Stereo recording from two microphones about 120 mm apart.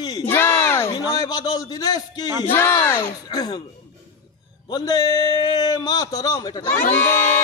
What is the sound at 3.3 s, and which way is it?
Speech, 35° left (ahead or behind).